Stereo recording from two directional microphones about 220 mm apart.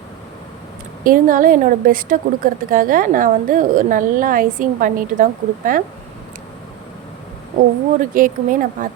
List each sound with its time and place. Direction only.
1.0 s a woman's voice: 40° right (ahead or behind)
8.1 s a woman's voice: 40° right (ahead or behind)